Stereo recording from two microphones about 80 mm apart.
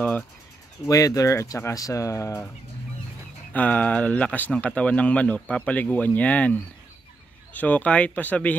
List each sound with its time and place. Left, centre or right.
0.8 s speech: left
3.5 s speech: left